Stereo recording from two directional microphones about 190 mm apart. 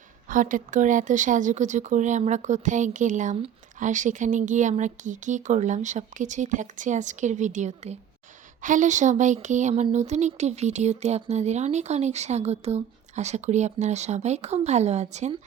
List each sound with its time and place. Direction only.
0.3 s speech: 45° right (ahead or behind)